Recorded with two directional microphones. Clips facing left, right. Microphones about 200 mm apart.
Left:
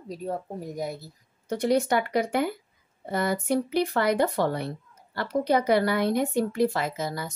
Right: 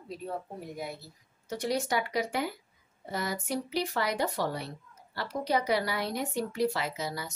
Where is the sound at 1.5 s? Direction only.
55° left (ahead or behind).